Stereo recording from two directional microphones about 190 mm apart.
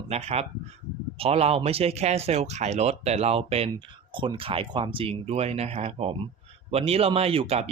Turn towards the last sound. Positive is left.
turn(degrees=-30)  # may be behind; listen again after turning